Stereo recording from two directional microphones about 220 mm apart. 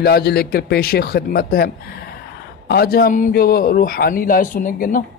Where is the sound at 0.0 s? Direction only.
45° left (ahead or behind).